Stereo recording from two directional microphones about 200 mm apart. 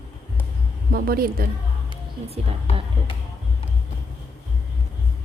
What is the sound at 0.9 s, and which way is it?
Speech, 50° right (ahead or behind).